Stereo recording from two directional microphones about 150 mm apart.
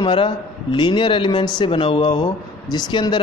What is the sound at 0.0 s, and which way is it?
A man's voice, 35° left (ahead or behind).